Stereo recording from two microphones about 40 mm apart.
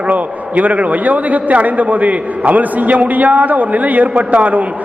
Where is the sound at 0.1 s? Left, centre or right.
Right.